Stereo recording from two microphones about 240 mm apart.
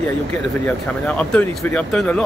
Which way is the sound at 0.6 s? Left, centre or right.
Centre.